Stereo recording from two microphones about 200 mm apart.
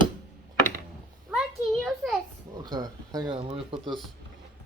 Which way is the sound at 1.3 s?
Centre (ahead or behind).